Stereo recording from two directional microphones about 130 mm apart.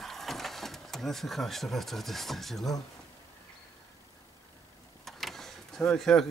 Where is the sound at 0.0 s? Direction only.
Centre (ahead or behind).